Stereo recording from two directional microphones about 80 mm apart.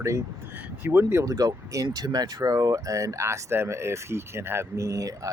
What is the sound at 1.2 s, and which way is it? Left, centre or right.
Speech, right.